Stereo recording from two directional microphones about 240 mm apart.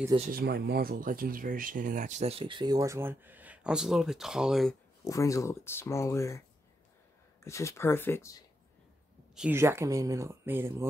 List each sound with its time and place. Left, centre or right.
0.2 s speech: right; by 4.7 s centre
5.0 s speech: centre
7.4 s speech: centre
9.3 s speech: centre